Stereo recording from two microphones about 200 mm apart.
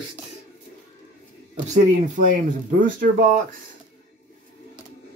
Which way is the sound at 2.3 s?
40° right (ahead or behind).